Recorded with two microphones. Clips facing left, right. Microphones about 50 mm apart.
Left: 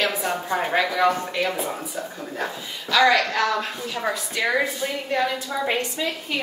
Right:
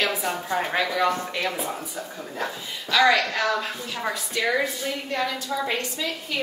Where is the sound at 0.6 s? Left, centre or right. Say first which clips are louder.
Left 2 dB; centre.